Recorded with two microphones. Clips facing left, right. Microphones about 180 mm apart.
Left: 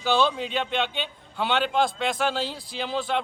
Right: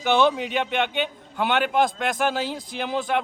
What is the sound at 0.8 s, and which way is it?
Speech, 60° right (ahead or behind).